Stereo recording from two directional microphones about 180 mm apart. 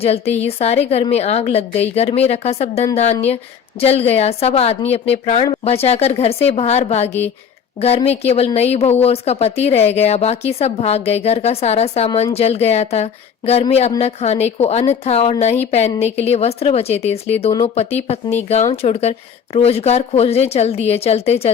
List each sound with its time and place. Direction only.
0.0 s a woman's voice: 35° left (ahead or behind)